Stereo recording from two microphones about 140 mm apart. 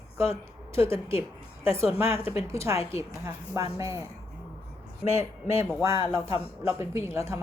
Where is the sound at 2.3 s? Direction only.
20° right (ahead or behind).